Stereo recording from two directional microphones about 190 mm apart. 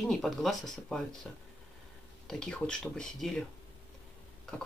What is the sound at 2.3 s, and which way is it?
Speech, 5° left (ahead or behind).